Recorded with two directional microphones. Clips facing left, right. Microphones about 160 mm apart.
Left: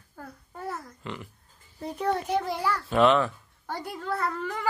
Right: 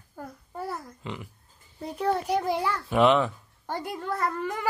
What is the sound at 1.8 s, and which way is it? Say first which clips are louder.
Speech: right 1 dB; 5° right (ahead or behind).